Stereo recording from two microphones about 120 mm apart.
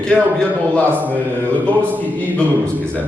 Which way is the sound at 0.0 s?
10° left (ahead or behind).